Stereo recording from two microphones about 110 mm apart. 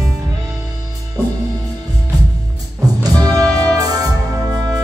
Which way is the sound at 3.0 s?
35° right (ahead or behind).